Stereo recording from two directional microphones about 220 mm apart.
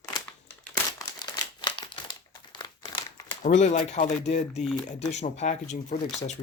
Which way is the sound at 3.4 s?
35° left (ahead or behind).